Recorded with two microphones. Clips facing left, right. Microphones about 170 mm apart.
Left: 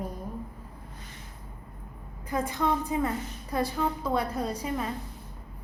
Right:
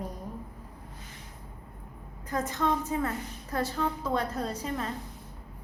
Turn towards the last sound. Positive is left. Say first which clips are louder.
# left 2 dB
turn(degrees=10)  # may be behind; listen again after turning